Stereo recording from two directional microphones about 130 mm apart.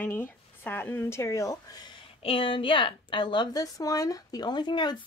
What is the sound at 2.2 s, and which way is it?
A woman's voice, 45° left (ahead or behind).